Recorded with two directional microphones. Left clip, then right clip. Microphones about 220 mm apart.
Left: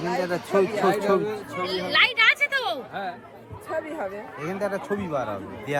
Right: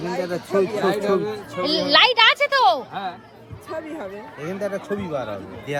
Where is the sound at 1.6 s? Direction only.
55° right (ahead or behind).